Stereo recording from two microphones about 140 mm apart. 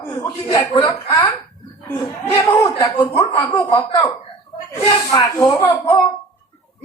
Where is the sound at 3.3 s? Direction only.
30° left (ahead or behind).